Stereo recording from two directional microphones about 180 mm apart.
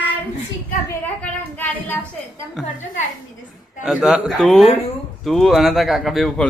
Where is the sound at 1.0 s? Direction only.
10° left (ahead or behind).